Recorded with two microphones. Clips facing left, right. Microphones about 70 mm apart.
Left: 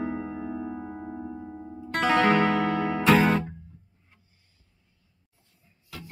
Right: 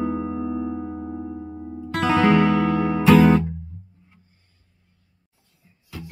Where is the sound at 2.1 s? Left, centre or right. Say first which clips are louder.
Right 4 dB; right.